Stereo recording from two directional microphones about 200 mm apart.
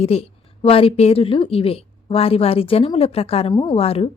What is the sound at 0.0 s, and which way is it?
A woman's voice, 30° left (ahead or behind).